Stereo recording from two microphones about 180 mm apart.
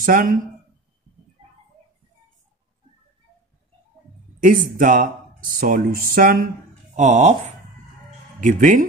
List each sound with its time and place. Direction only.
0.0 s speech: 50° right (ahead or behind)
4.4 s speech: 50° right (ahead or behind)
7.0 s speech: 40° right (ahead or behind)
8.4 s speech: 45° right (ahead or behind)